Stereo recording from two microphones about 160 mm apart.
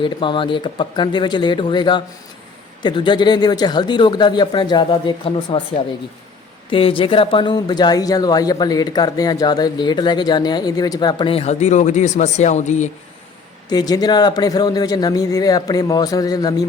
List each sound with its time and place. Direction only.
0.0 s speech: 30° left (ahead or behind); by 12.9 s 50° left (ahead or behind)
13.7 s speech: 25° left (ahead or behind)